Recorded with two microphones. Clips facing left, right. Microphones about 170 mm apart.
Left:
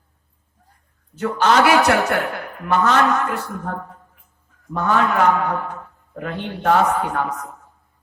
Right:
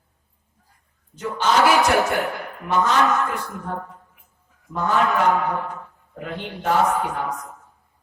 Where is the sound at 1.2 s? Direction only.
65° left (ahead or behind).